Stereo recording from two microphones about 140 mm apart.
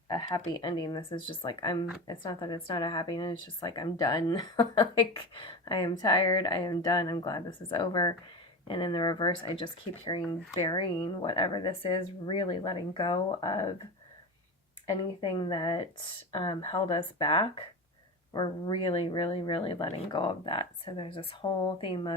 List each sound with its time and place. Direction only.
0.1 s speech: 30° left (ahead or behind)
14.8 s speech: 35° left (ahead or behind)